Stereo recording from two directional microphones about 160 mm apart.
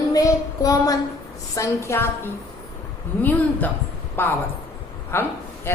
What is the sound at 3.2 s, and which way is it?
A man's voice, 10° left (ahead or behind).